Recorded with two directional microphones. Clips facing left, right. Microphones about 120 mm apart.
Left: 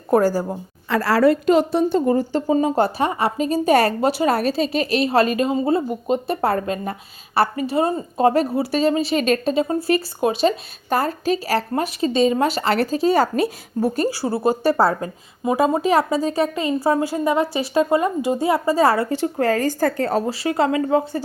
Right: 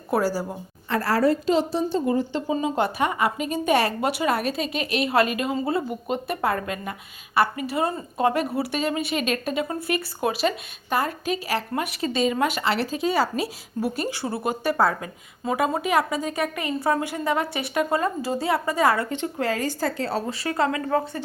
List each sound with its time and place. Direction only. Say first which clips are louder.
0.1 s speech: left 6 dB; 45° left (ahead or behind)
0.9 s a woman's voice: left 5 dB; 90° left; by 9.4 s 40° left (ahead or behind)
9.4 s a woman's voice: left 7 dB; 30° left (ahead or behind)
10.8 s a woman's voice: left 5 dB; 40° left (ahead or behind)
15.4 s a woman's voice: left 6 dB; 25° left (ahead or behind); by 20.2 s 50° left (ahead or behind)
20.2 s a woman's voice: left 4 dB; 30° left (ahead or behind)